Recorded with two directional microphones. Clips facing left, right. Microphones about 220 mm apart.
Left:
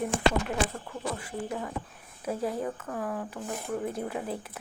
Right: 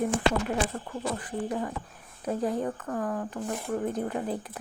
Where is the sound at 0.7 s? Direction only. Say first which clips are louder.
Right 3 dB; 5° right (ahead or behind).